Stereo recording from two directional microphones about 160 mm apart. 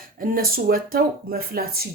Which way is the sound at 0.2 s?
65° right (ahead or behind).